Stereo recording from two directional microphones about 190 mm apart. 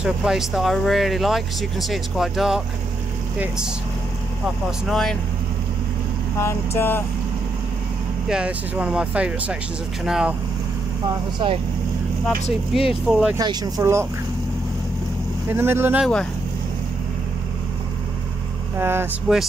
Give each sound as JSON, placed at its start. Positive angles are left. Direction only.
{"t": 0.0, "sound": "speech", "side_deg": -5}
{"t": 6.3, "sound": "vehicle", "side_deg": 15}
{"t": 8.3, "sound": "speech", "side_deg": -5}
{"t": 11.3, "sound": "speech", "side_deg": -25}
{"t": 12.7, "sound": "speech", "side_deg": 0}
{"t": 13.4, "sound": "speech", "side_deg": -20}
{"t": 15.5, "sound": "speech", "side_deg": -10}
{"t": 18.8, "sound": "speech", "side_deg": -10}